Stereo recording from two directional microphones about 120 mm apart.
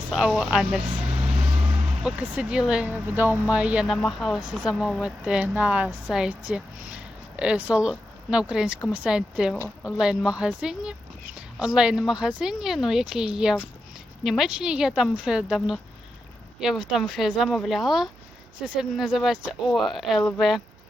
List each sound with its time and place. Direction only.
0.1 s a woman's voice: 5° right (ahead or behind)
1.0 s vehicle: 60° right (ahead or behind)
2.0 s a woman's voice: 10° right (ahead or behind)
3.9 s a woman's voice: 5° left (ahead or behind)